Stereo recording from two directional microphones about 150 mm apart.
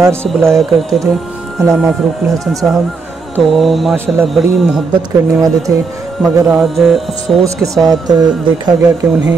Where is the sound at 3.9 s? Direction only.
15° right (ahead or behind).